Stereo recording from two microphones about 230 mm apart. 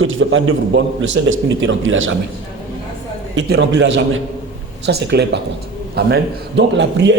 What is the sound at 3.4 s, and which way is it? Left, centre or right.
A man's voice, right.